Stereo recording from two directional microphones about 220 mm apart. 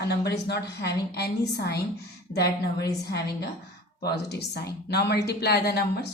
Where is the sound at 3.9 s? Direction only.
50° left (ahead or behind).